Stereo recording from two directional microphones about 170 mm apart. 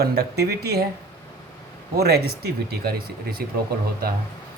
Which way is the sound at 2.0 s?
70° right (ahead or behind).